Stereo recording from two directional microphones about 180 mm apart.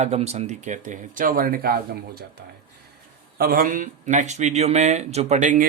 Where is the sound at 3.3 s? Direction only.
55° right (ahead or behind).